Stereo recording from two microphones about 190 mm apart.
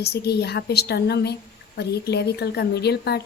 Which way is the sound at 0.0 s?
60° left (ahead or behind).